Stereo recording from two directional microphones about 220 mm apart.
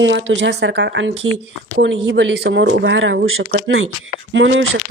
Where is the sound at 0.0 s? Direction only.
55° right (ahead or behind).